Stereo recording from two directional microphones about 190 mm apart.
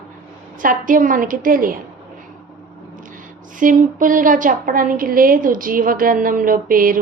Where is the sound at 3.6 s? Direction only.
45° right (ahead or behind).